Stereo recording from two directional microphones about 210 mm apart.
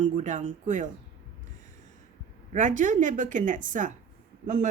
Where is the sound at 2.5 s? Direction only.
35° right (ahead or behind).